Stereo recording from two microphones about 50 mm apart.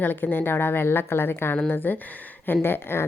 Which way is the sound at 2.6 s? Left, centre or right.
Left.